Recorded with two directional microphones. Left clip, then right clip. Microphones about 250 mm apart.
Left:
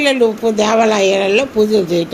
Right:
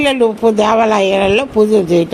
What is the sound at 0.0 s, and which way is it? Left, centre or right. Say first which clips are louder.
Speech: right 1 dB; right.